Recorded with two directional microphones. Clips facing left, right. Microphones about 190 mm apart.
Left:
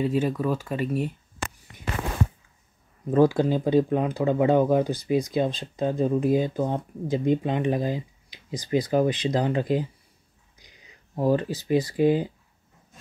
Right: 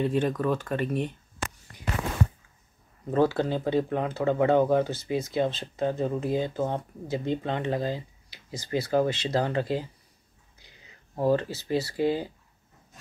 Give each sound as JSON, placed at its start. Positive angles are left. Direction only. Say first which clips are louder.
{"t": 0.0, "sound": "speech", "louder": "left 1 dB", "side_deg": 10}
{"t": 3.1, "sound": "speech", "louder": "left 4 dB", "side_deg": 15}